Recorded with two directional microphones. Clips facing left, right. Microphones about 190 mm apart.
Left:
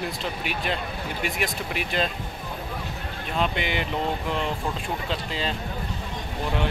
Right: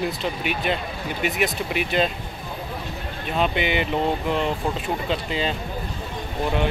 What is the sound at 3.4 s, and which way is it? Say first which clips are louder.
Speech: right 4 dB; 5° right (ahead or behind).